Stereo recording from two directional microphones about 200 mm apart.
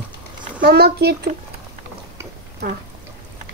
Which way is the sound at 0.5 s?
55° right (ahead or behind).